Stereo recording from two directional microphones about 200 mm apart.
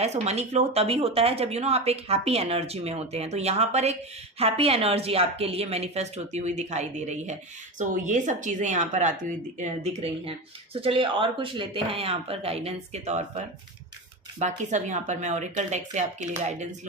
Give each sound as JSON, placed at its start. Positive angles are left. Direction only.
{"t": 0.0, "sound": "speech", "side_deg": -35}